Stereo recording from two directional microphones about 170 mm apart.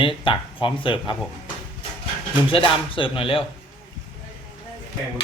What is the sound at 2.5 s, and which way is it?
Speech, 30° left (ahead or behind).